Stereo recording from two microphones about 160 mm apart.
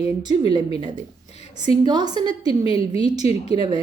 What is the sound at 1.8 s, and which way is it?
Speech, 25° right (ahead or behind).